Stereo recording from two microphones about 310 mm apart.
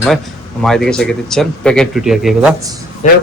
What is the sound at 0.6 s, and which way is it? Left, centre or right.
A man's voice, centre.